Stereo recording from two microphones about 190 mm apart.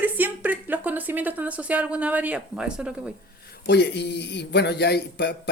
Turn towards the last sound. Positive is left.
turn(degrees=60)  # may be behind; listen again after turning